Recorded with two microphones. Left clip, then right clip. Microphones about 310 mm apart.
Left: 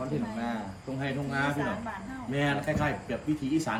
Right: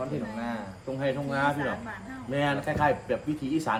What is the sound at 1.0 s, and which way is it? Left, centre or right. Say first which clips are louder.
Speech: right 4 dB; centre.